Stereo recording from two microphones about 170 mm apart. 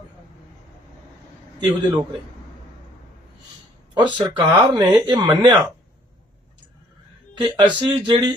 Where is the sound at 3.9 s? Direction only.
25° right (ahead or behind).